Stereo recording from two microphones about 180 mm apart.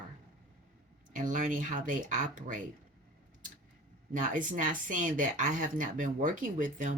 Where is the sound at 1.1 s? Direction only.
45° right (ahead or behind).